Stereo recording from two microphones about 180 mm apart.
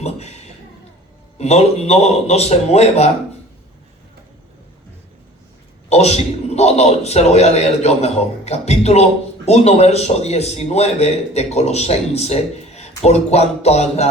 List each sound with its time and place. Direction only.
1.4 s a man's voice: 35° left (ahead or behind)
5.9 s a man's voice: 35° left (ahead or behind)